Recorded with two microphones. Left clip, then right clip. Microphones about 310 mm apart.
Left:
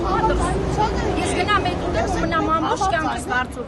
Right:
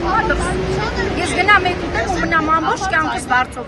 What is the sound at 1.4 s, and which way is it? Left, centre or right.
Speech, centre.